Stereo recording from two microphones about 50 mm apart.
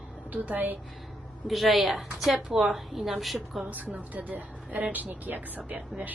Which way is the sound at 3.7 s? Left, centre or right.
Right.